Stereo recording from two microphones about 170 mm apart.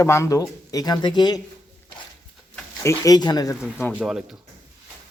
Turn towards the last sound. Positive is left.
turn(degrees=-5)  # may be behind; listen again after turning